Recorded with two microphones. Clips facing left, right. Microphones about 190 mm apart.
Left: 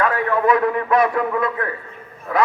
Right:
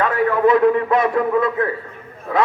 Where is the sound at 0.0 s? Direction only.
25° right (ahead or behind).